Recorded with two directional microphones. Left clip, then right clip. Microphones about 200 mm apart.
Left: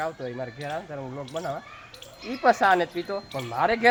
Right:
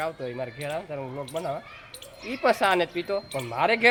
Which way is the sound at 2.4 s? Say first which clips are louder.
Left 2 dB; 5° left (ahead or behind).